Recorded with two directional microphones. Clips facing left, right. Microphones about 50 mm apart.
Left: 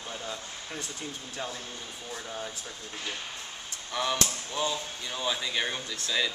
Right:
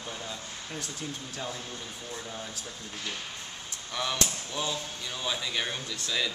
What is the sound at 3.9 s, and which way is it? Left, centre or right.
Speech, centre.